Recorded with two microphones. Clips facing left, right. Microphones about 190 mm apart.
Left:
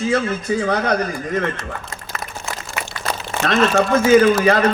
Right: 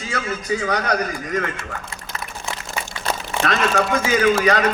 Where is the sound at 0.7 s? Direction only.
30° left (ahead or behind).